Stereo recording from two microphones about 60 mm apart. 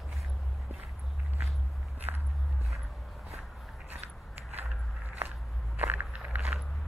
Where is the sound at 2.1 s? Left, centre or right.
Right.